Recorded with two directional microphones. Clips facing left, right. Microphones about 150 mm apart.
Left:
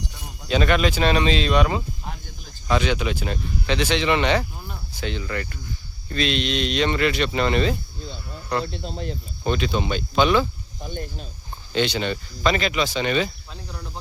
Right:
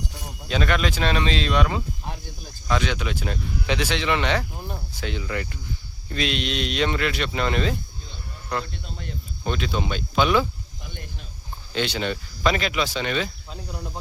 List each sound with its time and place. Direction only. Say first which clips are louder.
0.4 s speech: left 4 dB; centre (ahead or behind)
4.9 s cricket: left 2 dB; 5° right (ahead or behind)
6.1 s speech: left 2 dB; 10° right (ahead or behind)
8.6 s speech: left 7 dB; 30° left (ahead or behind)
9.4 s speech: left 3 dB; centre (ahead or behind)
10.8 s speech: left 9 dB; 35° left (ahead or behind)
11.7 s speech: left 3 dB; centre (ahead or behind)